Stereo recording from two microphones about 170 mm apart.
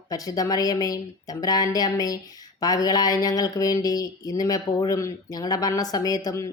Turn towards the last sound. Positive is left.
turn(degrees=20)  # may be behind; listen again after turning